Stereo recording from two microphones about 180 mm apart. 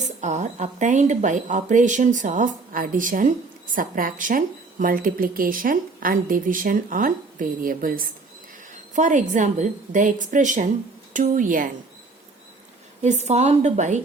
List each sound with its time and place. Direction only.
0.0 s speech: 40° right (ahead or behind)
13.0 s speech: 40° right (ahead or behind)